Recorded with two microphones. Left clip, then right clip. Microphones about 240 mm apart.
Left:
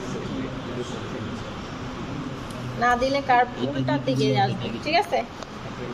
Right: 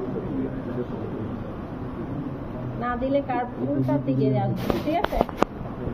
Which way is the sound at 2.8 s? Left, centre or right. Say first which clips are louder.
Left 4 dB; left.